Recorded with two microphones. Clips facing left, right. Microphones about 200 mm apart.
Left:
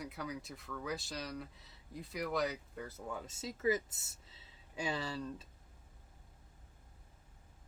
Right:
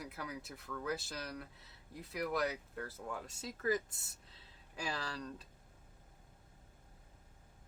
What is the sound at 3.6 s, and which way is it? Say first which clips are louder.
Speech: left 2 dB; 25° left (ahead or behind).